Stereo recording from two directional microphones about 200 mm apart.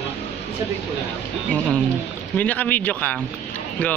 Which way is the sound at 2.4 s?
10° left (ahead or behind).